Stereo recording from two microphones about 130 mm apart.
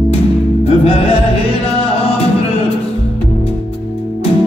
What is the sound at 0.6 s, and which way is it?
Music, 50° left (ahead or behind).